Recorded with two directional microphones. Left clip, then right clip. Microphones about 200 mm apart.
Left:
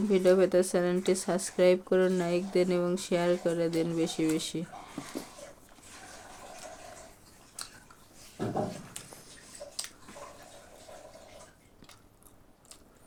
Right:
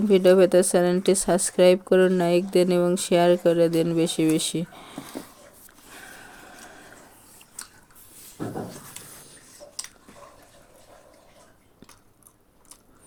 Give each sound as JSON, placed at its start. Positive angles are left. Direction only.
{"t": 0.1, "sound": "speech", "side_deg": -35}